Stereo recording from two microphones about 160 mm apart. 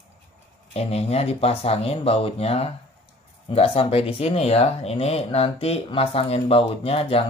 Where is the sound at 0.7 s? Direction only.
40° left (ahead or behind).